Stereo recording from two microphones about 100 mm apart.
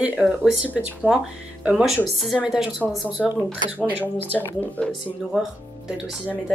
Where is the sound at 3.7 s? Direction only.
20° right (ahead or behind).